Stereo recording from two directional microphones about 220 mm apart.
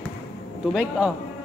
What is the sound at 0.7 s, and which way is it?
Speech, 5° right (ahead or behind).